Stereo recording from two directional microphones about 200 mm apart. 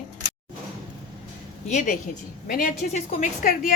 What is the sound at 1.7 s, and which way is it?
A woman's voice, 35° left (ahead or behind).